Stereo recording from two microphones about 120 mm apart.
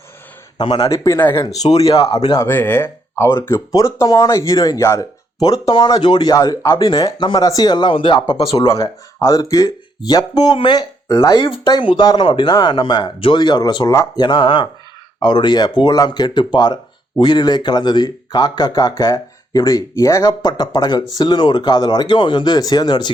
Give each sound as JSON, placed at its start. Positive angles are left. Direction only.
{"t": 0.6, "sound": "speech", "side_deg": 40}
{"t": 0.9, "sound": "speech", "side_deg": 25}
{"t": 1.6, "sound": "speech", "side_deg": 60}
{"t": 2.1, "sound": "speech", "side_deg": 30}
{"t": 2.5, "sound": "speech", "side_deg": 15}
{"t": 8.7, "sound": "speech", "side_deg": 25}